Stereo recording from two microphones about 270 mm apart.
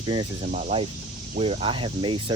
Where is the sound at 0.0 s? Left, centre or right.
Centre.